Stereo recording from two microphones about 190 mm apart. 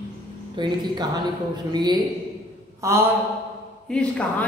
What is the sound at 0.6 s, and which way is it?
A woman's voice, 25° right (ahead or behind).